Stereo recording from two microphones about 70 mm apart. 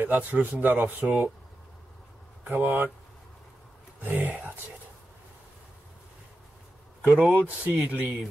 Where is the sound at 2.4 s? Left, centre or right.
Right.